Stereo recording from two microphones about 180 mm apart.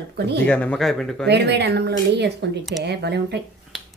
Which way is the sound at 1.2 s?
70° right (ahead or behind).